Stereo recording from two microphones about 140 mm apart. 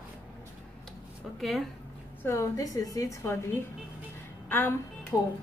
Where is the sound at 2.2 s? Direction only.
20° left (ahead or behind).